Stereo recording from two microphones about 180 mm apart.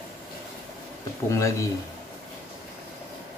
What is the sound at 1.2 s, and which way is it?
Speech, 15° left (ahead or behind).